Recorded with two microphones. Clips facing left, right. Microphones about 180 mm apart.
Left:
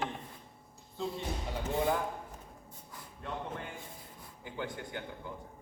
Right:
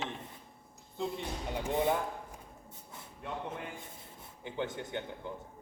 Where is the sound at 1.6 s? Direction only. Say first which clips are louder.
Right 1 dB; 20° right (ahead or behind).